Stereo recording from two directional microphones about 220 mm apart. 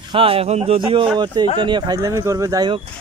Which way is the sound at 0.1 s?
25° right (ahead or behind).